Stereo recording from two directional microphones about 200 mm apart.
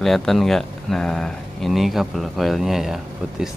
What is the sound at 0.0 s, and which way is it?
Speech, centre (ahead or behind).